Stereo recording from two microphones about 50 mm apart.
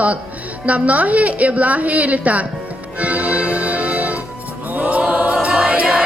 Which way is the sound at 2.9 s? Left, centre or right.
Right.